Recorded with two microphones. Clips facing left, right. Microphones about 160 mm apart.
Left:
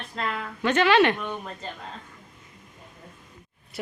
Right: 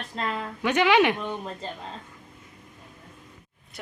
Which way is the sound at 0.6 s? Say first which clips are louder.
Left 1 dB; 15° right (ahead or behind).